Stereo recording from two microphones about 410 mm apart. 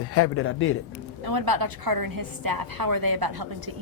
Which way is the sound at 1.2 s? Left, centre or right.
Right.